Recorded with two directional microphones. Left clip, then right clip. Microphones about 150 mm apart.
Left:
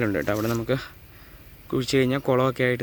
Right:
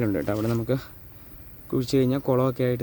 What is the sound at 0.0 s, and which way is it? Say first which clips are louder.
Speech: left 2 dB; centre (ahead or behind).